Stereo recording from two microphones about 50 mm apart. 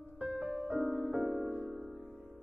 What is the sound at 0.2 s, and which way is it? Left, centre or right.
Music, right.